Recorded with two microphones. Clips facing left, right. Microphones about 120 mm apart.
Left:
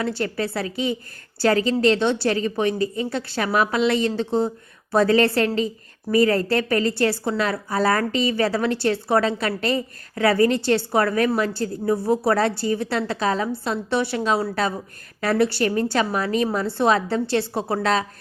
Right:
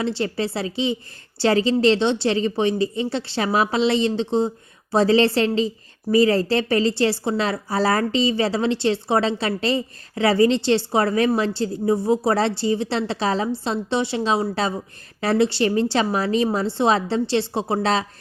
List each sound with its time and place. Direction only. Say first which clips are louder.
0.0 s a woman's voice: right 1 dB; 25° right (ahead or behind)